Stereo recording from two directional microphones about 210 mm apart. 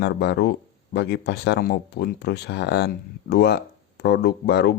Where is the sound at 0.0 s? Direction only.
50° left (ahead or behind).